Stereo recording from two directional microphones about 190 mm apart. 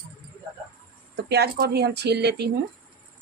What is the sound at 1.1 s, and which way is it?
Speech, 60° right (ahead or behind).